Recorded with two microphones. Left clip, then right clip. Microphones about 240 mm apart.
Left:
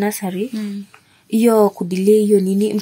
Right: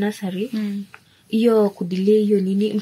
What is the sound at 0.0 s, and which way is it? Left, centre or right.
Speech, left.